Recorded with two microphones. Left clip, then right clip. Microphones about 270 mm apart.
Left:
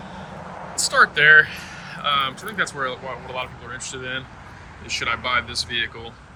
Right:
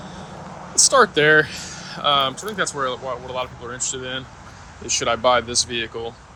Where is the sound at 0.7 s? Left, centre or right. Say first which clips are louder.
Right 2 dB; centre.